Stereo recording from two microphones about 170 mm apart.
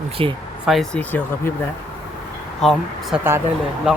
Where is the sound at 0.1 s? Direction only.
30° right (ahead or behind).